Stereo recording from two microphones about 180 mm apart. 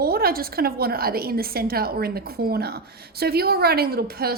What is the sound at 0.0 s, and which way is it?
A woman's voice, 55° right (ahead or behind).